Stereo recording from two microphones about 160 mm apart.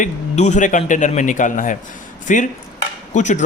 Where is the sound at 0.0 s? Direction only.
50° left (ahead or behind).